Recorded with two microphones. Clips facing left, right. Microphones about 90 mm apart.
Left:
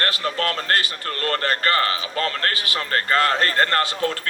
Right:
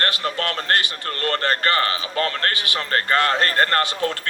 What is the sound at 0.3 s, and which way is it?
A man's voice, 25° right (ahead or behind).